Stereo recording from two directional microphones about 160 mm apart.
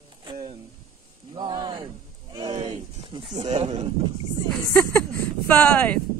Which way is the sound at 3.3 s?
45° right (ahead or behind).